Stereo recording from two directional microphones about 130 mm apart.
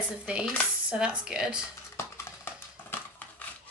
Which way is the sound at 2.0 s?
15° left (ahead or behind).